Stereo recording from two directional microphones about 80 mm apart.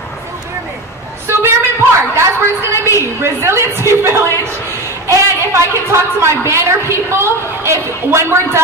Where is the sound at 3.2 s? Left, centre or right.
Right.